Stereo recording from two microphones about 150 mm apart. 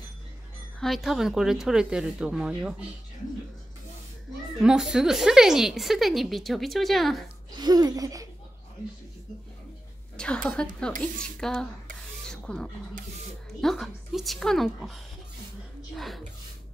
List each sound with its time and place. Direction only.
0.7 s speech: centre (ahead or behind)
4.6 s speech: 5° right (ahead or behind)
7.5 s speech: 25° right (ahead or behind)
10.1 s a woman's voice: 5° left (ahead or behind)
12.3 s a sound: 5° left (ahead or behind)
13.6 s speech: centre (ahead or behind)